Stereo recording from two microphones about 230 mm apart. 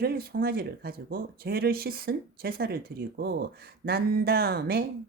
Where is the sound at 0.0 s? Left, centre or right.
Right.